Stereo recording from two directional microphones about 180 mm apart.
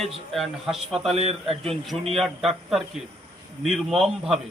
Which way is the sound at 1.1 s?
35° right (ahead or behind).